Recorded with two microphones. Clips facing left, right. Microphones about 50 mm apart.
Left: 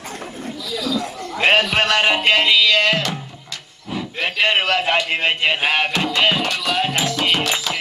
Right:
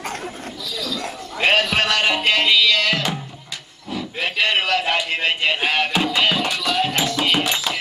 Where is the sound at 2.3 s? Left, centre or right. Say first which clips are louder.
Even; centre.